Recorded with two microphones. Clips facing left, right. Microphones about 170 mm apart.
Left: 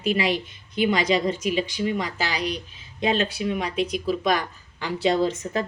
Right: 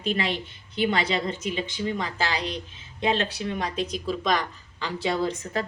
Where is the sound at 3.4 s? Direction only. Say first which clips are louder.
Left 3 dB; 10° left (ahead or behind).